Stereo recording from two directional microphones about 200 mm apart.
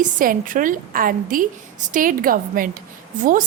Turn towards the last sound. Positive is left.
turn(degrees=-40)  # may be behind; listen again after turning